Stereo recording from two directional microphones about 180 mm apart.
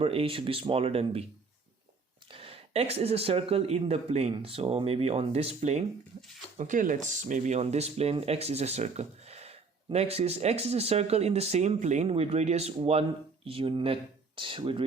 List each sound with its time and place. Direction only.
0.0 s speech: 30° right (ahead or behind)
2.3 s a sound: 30° right (ahead or behind)
2.9 s speech: 35° right (ahead or behind)
6.6 s speech: 45° right (ahead or behind); by 14.8 s 30° right (ahead or behind)